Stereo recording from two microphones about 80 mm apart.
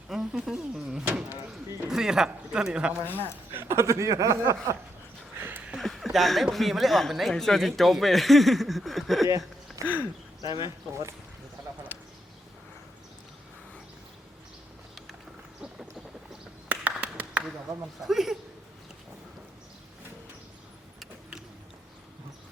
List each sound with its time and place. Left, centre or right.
0.1 s speech: centre
3.0 s speech: left
3.5 s speech: right
5.4 s a sound: right
5.7 s speech: centre
9.8 s speech: left
10.6 s speech: right
16.6 s clapping: centre
18.0 s speech: centre